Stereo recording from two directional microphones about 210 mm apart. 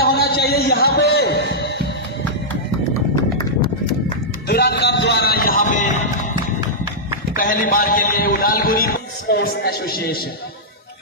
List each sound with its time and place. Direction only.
0.0 s music: 45° left (ahead or behind)
4.5 s music: 50° left (ahead or behind)
7.3 s a man's voice: 40° left (ahead or behind)